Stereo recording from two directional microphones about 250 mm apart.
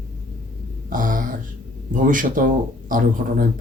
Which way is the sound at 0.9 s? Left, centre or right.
Right.